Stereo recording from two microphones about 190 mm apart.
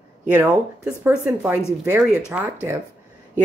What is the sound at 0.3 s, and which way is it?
Speech, 10° right (ahead or behind).